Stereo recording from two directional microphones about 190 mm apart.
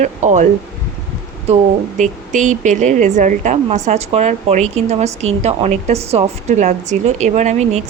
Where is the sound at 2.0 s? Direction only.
40° right (ahead or behind).